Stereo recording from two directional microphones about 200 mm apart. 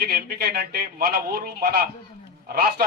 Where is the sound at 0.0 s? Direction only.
50° right (ahead or behind).